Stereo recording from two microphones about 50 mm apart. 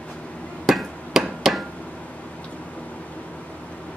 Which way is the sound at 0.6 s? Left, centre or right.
Centre.